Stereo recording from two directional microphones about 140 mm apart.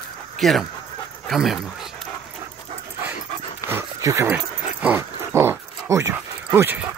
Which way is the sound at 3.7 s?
20° right (ahead or behind).